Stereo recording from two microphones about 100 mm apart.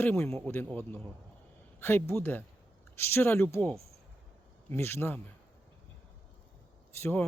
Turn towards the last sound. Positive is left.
turn(degrees=20)  # may be behind; listen again after turning